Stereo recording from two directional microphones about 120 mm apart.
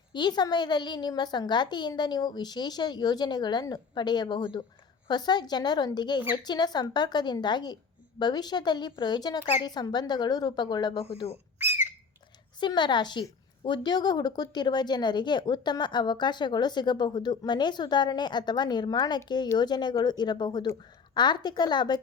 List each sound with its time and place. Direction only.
0.1 s a woman's voice: 40° left (ahead or behind)
11.0 s speech: 55° left (ahead or behind)
11.6 s squawk: 15° right (ahead or behind)
12.5 s a woman's voice: 40° left (ahead or behind)